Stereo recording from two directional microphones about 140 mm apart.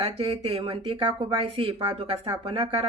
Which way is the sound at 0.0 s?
40° right (ahead or behind).